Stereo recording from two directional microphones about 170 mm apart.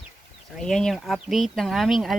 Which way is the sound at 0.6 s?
5° left (ahead or behind).